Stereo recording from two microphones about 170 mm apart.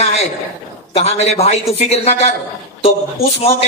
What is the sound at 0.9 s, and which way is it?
A man's voice, 40° left (ahead or behind).